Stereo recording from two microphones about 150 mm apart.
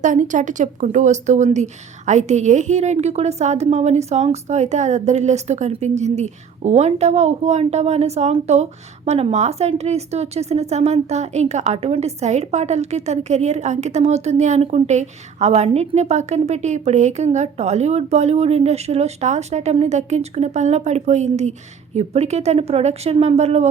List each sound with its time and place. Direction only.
0.0 s a woman's voice: 55° right (ahead or behind)